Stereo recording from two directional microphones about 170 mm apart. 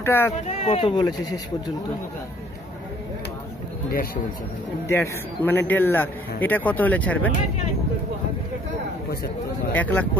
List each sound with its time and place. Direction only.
0.0 s speech: 15° left (ahead or behind)
0.5 s speech: 30° left (ahead or behind)
4.8 s a man's voice: 15° left (ahead or behind)
9.8 s a man's voice: 10° left (ahead or behind)